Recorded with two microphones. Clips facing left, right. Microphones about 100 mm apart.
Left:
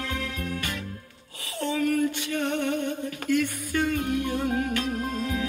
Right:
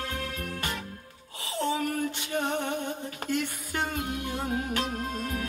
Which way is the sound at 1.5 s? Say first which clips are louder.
Left 4 dB; 25° right (ahead or behind).